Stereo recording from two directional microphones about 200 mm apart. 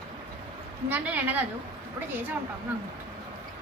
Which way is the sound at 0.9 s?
10° right (ahead or behind).